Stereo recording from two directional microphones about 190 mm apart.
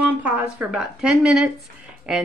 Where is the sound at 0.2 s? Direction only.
10° right (ahead or behind).